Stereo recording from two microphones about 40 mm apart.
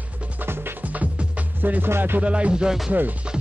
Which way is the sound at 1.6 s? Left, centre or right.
Right.